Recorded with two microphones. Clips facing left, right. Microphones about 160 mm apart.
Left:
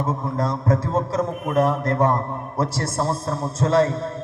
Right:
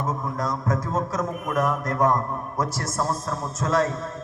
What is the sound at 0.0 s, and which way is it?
A man's voice, 30° left (ahead or behind).